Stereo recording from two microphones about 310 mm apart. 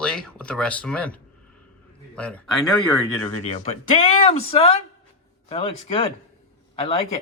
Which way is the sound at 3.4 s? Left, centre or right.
Centre.